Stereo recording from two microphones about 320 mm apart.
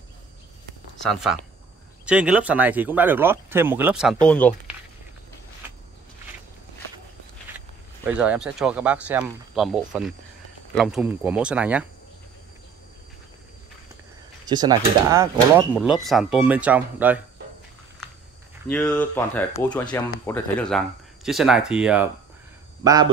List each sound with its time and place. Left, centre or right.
2.0 s speech: centre
8.1 s speech: centre
14.4 s speech: centre
18.7 s speech: centre